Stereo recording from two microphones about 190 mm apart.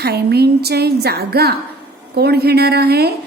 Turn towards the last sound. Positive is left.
turn(degrees=-55)  # may be behind; listen again after turning